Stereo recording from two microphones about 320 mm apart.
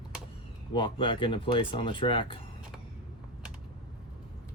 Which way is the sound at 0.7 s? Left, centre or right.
Centre.